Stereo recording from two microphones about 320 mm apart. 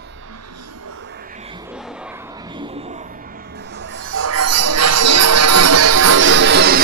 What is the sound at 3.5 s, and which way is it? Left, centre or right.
Music, right.